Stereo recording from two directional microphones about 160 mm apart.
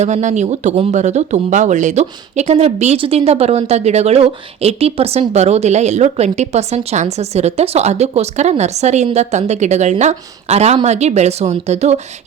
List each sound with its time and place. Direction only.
0.0 s speech: 50° right (ahead or behind)